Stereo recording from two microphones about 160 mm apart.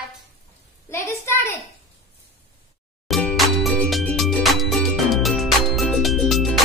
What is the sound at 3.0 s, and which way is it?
Music, 5° left (ahead or behind).